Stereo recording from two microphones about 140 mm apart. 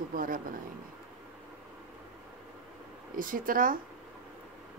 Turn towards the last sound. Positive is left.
turn(degrees=-80)